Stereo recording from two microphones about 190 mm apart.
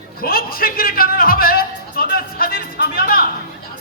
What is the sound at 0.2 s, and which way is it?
A man's voice, 50° left (ahead or behind).